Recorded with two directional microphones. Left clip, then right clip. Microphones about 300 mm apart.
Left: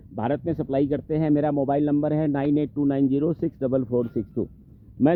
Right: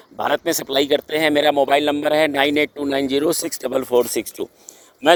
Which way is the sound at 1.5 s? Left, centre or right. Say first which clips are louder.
Right 6 dB; right.